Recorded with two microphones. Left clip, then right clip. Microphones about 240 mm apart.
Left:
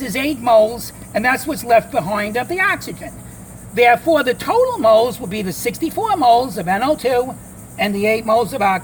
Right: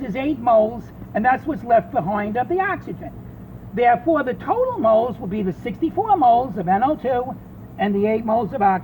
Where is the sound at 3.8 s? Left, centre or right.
Left.